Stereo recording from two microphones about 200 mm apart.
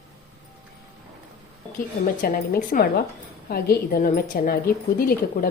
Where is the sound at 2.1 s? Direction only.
45° left (ahead or behind).